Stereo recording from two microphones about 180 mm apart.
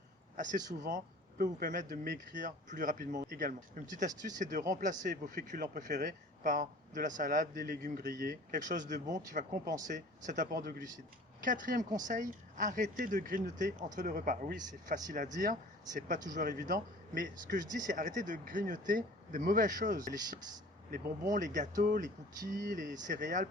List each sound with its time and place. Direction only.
0.3 s speech: 45° right (ahead or behind)